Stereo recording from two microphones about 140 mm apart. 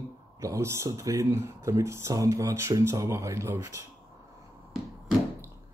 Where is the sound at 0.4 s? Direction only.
20° right (ahead or behind).